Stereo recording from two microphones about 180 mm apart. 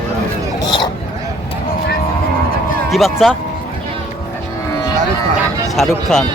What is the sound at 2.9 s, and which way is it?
Speech, centre (ahead or behind).